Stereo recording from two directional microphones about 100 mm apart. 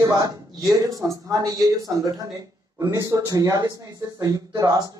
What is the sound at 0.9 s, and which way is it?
A man's voice, 35° right (ahead or behind).